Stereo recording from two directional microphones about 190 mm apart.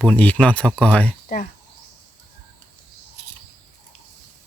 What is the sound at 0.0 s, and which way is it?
Speech, 5° left (ahead or behind).